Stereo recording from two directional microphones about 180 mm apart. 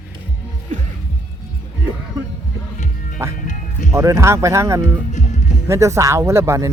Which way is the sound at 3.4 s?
45° left (ahead or behind).